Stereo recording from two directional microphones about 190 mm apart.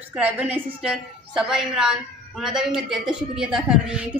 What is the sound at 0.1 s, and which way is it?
A woman's voice, 10° right (ahead or behind).